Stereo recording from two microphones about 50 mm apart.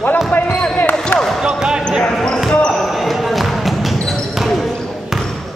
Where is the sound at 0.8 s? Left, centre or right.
Left.